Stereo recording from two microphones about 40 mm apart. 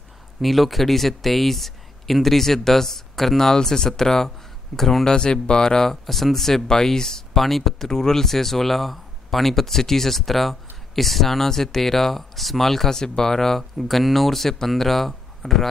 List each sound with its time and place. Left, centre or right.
0.4 s speech: centre